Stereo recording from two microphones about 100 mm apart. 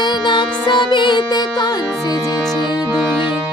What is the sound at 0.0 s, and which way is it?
Music, 50° left (ahead or behind).